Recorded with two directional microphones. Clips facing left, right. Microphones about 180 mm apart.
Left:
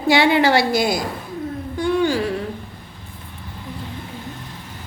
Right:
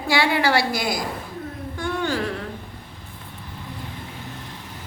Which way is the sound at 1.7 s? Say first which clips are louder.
Left 6 dB; 15° left (ahead or behind).